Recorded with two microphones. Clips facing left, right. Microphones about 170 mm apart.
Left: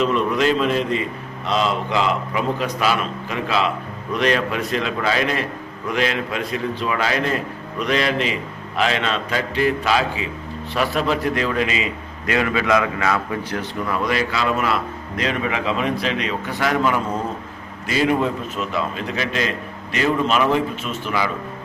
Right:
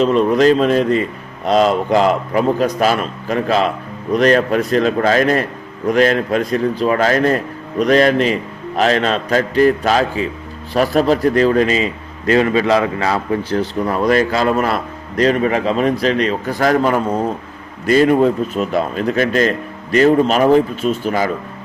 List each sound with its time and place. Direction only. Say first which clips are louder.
0.0 s a man's voice: right 7 dB; 35° right (ahead or behind)